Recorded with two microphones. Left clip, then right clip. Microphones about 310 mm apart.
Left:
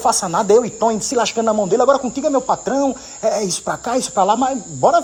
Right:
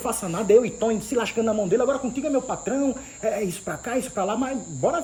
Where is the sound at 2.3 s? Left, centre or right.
Centre.